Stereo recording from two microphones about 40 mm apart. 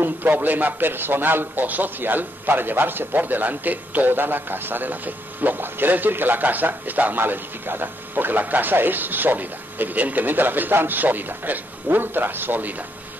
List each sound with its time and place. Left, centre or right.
0.0 s a man's voice: right